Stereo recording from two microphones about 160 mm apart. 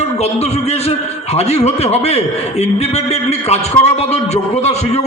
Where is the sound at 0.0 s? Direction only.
40° left (ahead or behind).